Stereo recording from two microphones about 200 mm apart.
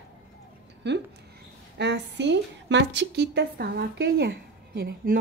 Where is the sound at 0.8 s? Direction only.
60° right (ahead or behind).